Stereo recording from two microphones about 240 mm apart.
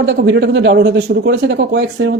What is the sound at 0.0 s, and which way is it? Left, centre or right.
Speech, right.